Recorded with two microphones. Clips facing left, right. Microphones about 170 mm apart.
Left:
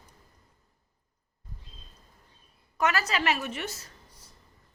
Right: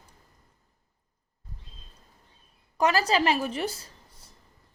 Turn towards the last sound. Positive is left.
turn(degrees=-30)  # may be behind; listen again after turning